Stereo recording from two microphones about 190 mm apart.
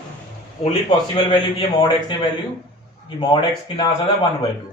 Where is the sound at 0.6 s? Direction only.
25° left (ahead or behind).